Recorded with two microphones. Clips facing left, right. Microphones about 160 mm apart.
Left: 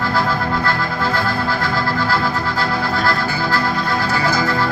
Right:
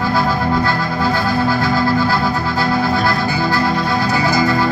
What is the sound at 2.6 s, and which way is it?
Music, 15° right (ahead or behind).